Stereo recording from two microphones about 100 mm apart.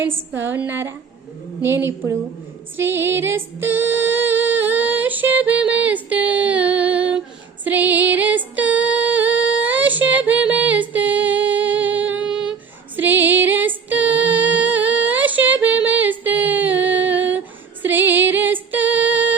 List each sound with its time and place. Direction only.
0.0 s a woman's voice: 20° right (ahead or behind)
2.7 s female singing: 25° right (ahead or behind)